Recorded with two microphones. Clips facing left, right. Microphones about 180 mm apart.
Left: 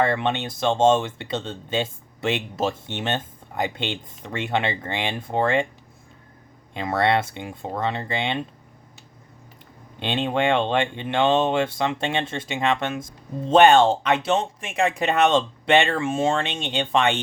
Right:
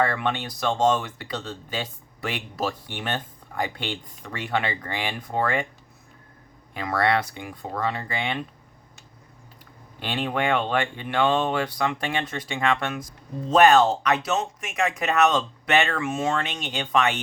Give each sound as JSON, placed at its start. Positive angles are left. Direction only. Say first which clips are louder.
{"t": 0.0, "sound": "speech", "louder": "left 2 dB", "side_deg": 25}
{"t": 6.7, "sound": "speech", "louder": "left 2 dB", "side_deg": 25}
{"t": 10.0, "sound": "speech", "louder": "left 3 dB", "side_deg": 25}